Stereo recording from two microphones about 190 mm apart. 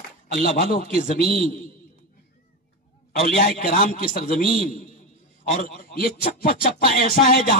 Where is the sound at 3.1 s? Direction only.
45° left (ahead or behind).